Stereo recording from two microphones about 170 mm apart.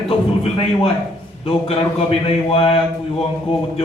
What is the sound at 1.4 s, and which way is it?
A man's voice, 30° left (ahead or behind).